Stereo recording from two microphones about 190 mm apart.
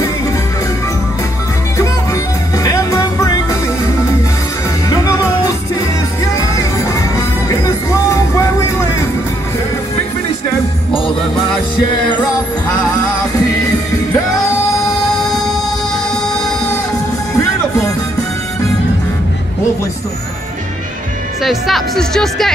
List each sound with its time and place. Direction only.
2.5 s music: 15° left (ahead or behind)
4.8 s music: 20° left (ahead or behind)
6.2 s music: 15° left (ahead or behind)
21.4 s speech: centre (ahead or behind)